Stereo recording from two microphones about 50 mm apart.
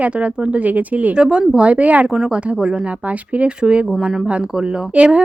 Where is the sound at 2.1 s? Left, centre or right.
Centre.